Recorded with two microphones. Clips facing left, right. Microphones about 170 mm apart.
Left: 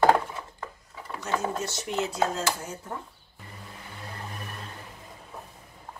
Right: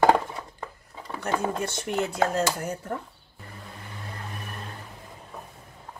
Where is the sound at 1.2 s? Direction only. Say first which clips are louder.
Right 2 dB; 55° right (ahead or behind).